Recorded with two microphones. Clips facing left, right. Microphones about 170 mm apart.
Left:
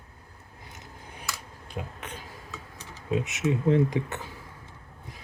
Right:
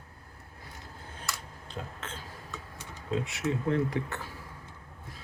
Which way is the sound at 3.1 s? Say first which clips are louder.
Left 4 dB; 20° left (ahead or behind).